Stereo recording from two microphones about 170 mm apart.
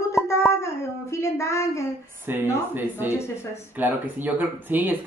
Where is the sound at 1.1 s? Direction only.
15° left (ahead or behind).